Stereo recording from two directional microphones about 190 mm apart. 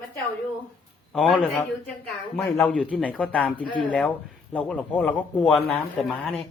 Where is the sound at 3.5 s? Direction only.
25° left (ahead or behind).